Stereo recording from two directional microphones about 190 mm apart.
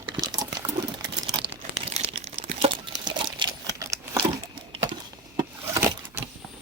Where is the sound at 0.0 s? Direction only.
20° right (ahead or behind).